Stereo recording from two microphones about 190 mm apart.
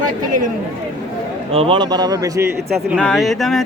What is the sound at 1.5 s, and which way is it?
A man's voice, 30° right (ahead or behind).